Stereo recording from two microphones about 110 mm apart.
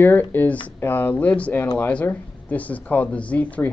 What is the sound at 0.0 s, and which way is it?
Speech, 20° left (ahead or behind).